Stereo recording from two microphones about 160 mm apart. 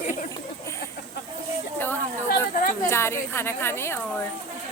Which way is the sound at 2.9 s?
15° left (ahead or behind).